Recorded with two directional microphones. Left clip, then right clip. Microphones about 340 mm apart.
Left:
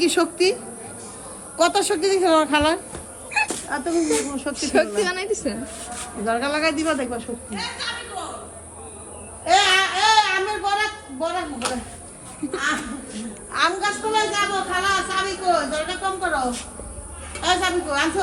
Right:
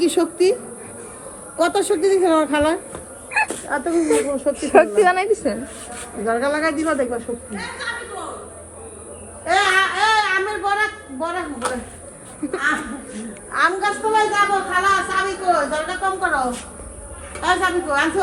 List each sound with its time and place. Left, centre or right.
0.0 s a woman's voice: centre
9.5 s a woman's voice: centre